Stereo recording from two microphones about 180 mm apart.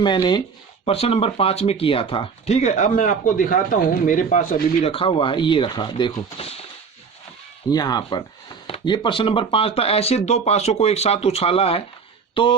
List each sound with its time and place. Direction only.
0.0 s speech: 25° left (ahead or behind); by 4.9 s 45° left (ahead or behind)
4.9 s speech: 30° left (ahead or behind)
7.7 s speech: 20° left (ahead or behind)